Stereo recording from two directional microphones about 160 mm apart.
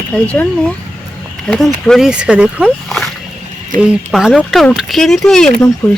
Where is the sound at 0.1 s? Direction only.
10° left (ahead or behind); by 2.6 s 10° right (ahead or behind).